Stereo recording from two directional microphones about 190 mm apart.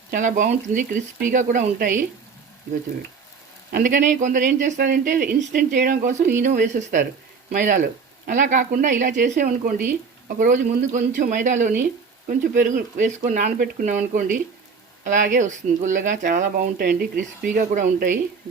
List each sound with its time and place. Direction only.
0.1 s speech: 40° right (ahead or behind)
3.7 s speech: 45° right (ahead or behind)